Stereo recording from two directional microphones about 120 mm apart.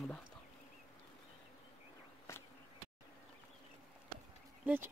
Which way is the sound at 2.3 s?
25° left (ahead or behind).